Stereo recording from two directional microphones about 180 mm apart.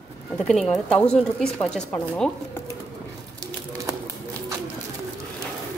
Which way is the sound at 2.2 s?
15° left (ahead or behind).